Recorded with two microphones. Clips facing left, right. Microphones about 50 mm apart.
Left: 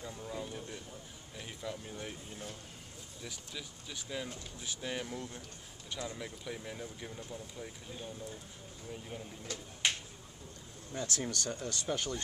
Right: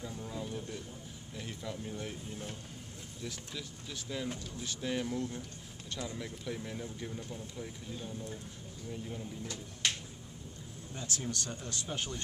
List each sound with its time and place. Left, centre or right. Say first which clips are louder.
0.0 s speech: right 1 dB; centre
9.8 s finger snapping: left 1 dB; centre
11.0 s speech: left 2 dB; left
11.4 s speech: left 4 dB; centre